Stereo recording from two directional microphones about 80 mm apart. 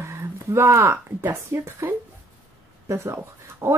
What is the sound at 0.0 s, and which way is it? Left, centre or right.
Speech, right.